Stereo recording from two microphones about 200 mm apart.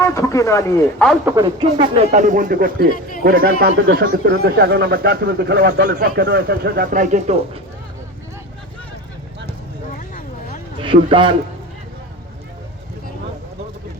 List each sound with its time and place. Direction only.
0.0 s a man's voice: 15° left (ahead or behind)
1.5 s speech: 25° right (ahead or behind)
10.8 s a man's voice: 25° right (ahead or behind)